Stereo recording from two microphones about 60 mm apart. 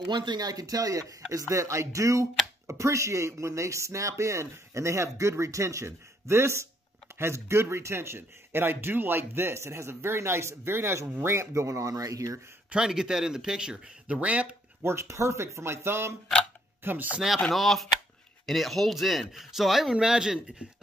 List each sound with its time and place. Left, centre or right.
0.4 s speech: right
1.5 s speech: right
2.6 s speech: right
2.9 s speech: right
12.7 s speech: centre
14.8 s speech: right
16.8 s speech: right
17.4 s speech: centre